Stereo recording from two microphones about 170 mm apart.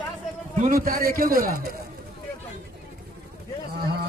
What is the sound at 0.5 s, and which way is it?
A man's voice, 50° right (ahead or behind).